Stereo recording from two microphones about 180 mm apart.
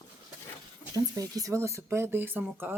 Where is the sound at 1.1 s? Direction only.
20° right (ahead or behind).